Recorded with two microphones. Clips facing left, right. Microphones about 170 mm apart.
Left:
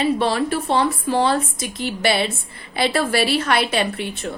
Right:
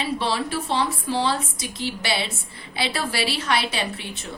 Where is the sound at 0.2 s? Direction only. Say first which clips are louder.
Left 5 dB; 50° left (ahead or behind).